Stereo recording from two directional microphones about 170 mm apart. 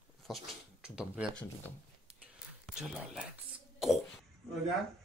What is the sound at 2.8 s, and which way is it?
Speech, 5° right (ahead or behind).